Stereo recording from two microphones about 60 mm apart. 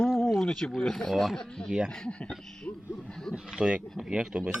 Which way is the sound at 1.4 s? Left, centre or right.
Centre.